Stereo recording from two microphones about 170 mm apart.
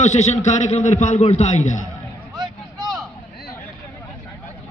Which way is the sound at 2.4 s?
25° right (ahead or behind).